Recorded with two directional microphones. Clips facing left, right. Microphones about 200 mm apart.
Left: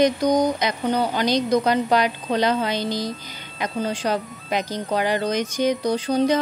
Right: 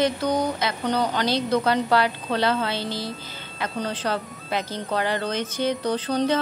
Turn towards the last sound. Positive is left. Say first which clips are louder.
# left 3 dB
turn(degrees=10)  # may be behind; listen again after turning